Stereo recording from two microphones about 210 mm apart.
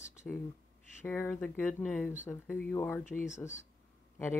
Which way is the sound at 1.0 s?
10° left (ahead or behind).